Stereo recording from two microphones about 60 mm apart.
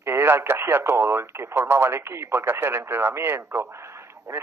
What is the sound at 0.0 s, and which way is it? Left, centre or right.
Speech, right.